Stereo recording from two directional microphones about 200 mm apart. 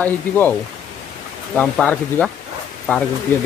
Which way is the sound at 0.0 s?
10° left (ahead or behind).